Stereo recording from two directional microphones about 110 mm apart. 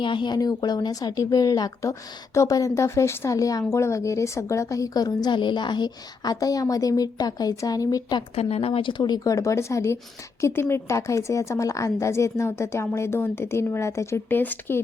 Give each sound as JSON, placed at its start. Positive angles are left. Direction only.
{"t": 0.0, "sound": "a woman's voice", "side_deg": 45}
{"t": 8.4, "sound": "a woman's voice", "side_deg": 65}